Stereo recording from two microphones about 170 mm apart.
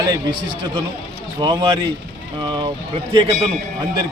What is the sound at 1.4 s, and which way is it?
A man's voice, 30° right (ahead or behind).